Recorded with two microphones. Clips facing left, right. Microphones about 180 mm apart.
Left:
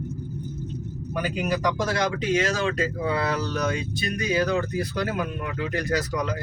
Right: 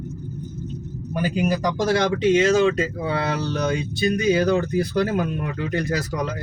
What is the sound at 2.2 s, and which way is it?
Speech, 25° right (ahead or behind).